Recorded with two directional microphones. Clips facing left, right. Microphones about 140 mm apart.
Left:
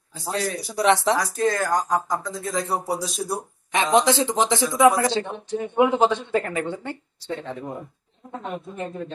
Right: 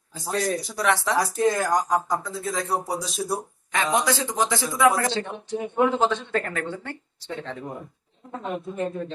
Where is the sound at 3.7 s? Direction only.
25° left (ahead or behind).